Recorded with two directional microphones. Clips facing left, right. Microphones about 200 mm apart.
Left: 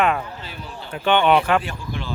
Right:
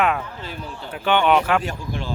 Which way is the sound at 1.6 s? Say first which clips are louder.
Right 2 dB; 40° right (ahead or behind).